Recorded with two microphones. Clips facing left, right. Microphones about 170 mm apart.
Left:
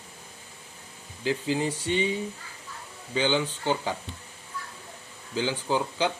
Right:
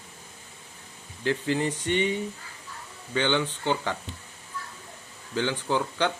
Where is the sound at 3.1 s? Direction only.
10° left (ahead or behind).